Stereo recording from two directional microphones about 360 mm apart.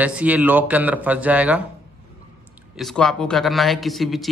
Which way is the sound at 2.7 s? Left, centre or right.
Centre.